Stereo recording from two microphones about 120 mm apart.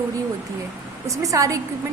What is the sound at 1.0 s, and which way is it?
Speech, 25° right (ahead or behind).